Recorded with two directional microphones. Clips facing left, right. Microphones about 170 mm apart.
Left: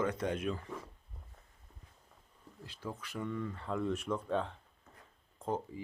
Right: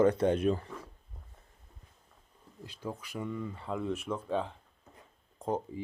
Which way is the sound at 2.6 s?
15° right (ahead or behind).